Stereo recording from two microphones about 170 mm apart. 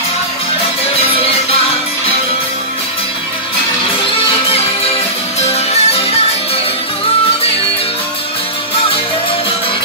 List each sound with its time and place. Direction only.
5.4 s music: 35° left (ahead or behind)